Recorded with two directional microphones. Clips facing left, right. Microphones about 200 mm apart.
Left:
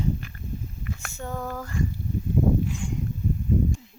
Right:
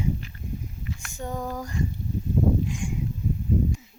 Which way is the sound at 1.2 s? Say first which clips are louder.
Right 2 dB; 15° right (ahead or behind).